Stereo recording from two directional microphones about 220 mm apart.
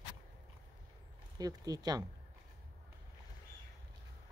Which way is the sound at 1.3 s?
15° right (ahead or behind).